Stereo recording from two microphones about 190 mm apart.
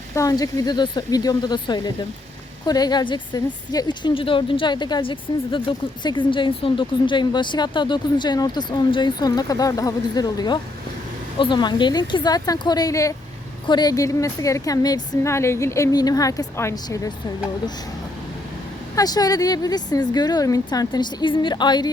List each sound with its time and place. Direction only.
0.1 s a woman's voice: 15° left (ahead or behind)
18.9 s a woman's voice: 20° left (ahead or behind)